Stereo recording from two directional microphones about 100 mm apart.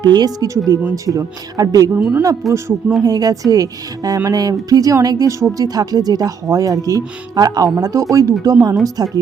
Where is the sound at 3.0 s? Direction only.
40° right (ahead or behind).